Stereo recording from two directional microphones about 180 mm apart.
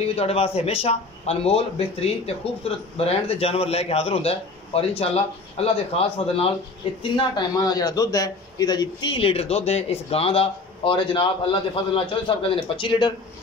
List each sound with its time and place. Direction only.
0.1 s a man's voice: 35° left (ahead or behind)